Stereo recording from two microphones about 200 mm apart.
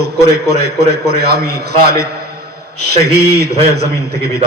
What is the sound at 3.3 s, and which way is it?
Speech, 55° right (ahead or behind).